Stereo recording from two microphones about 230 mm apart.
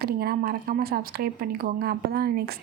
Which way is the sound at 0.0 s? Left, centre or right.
Right.